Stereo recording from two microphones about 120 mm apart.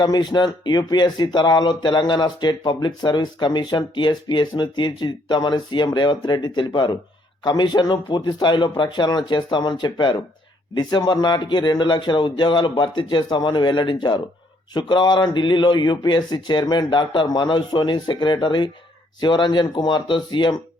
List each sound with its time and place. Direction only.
0.0 s speech: 35° left (ahead or behind)